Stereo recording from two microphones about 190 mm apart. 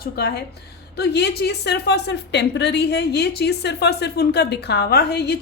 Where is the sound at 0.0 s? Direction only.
55° left (ahead or behind).